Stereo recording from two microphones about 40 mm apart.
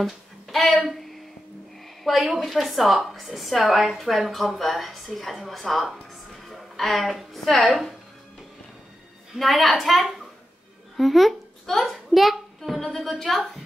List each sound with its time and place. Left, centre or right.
0.0 s a sound: centre
2.0 s a woman's voice: centre
7.4 s a woman's voice: centre
9.4 s a woman's voice: centre